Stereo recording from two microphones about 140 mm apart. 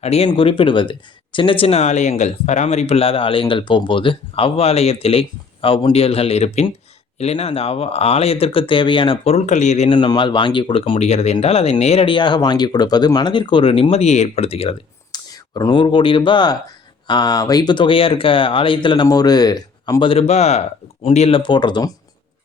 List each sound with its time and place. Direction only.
0.0 s speech: 45° left (ahead or behind)
9.9 s speech: 35° left (ahead or behind)
15.1 s speech: 30° left (ahead or behind)